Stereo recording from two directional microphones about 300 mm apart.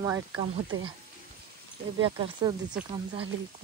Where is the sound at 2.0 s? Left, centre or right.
Centre.